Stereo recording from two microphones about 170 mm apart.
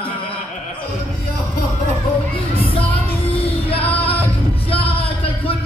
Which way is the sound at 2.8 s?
10° left (ahead or behind).